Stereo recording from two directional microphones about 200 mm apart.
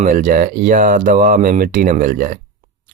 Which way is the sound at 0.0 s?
40° right (ahead or behind).